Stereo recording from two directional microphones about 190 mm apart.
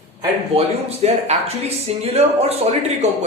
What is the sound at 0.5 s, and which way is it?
Speech, 35° right (ahead or behind).